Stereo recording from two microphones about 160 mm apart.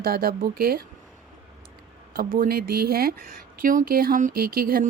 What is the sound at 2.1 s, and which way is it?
Speech, 65° right (ahead or behind).